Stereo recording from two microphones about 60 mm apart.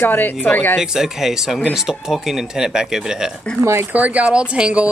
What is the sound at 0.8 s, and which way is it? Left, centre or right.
Speech, centre.